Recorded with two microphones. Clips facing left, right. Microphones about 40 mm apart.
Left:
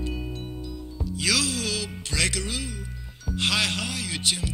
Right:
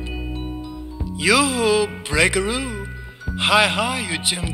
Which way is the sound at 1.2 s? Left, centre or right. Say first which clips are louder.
Right 10 dB; right.